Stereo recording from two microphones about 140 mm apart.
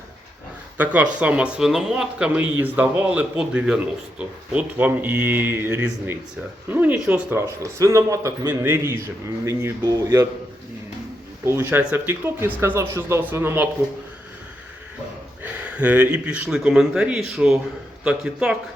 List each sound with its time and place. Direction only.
0.8 s a man's voice: 10° right (ahead or behind)
11.4 s speech: 15° right (ahead or behind)
15.4 s a man's voice: 10° right (ahead or behind)